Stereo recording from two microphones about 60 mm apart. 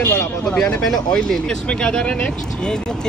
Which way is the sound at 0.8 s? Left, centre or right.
Centre.